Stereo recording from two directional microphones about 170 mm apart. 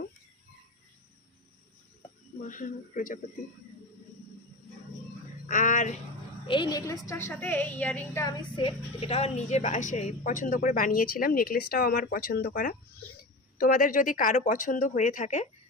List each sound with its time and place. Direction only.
2.4 s speech: 50° left (ahead or behind)
5.5 s a woman's voice: 50° left (ahead or behind)
6.5 s a woman's voice: 25° left (ahead or behind); by 8.2 s 10° left (ahead or behind)
8.2 s a woman's voice: 25° left (ahead or behind); by 15.4 s 45° left (ahead or behind)